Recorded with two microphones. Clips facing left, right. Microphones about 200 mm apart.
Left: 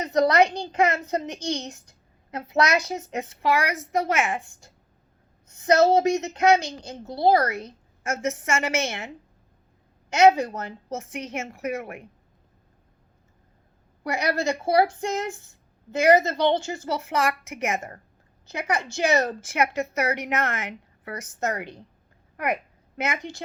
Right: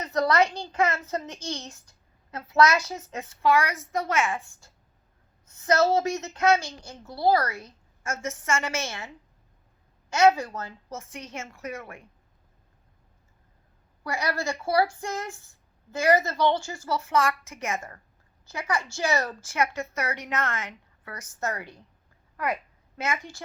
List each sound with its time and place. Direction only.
0.0 s a child's voice: 15° left (ahead or behind)
10.1 s a woman's voice: 20° left (ahead or behind)
14.0 s a woman's voice: 20° left (ahead or behind)